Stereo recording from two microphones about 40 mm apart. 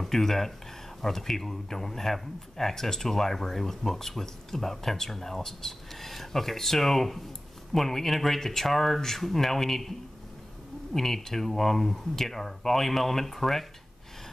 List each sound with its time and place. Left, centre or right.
0.0 s speech: centre